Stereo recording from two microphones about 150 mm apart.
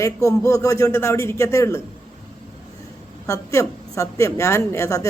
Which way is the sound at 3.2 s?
20° left (ahead or behind).